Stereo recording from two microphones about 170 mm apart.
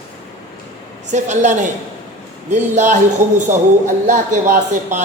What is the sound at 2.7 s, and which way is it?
Speech, 45° right (ahead or behind).